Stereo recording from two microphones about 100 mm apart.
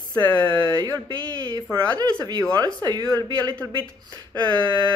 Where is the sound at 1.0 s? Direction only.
45° right (ahead or behind).